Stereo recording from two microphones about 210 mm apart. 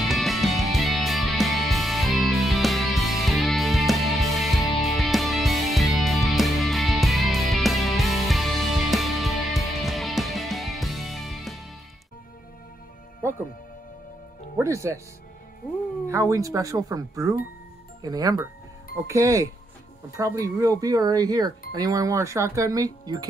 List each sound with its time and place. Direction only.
0.0 s music: centre (ahead or behind)
14.6 s speech: 15° right (ahead or behind)
16.1 s speech: 15° right (ahead or behind)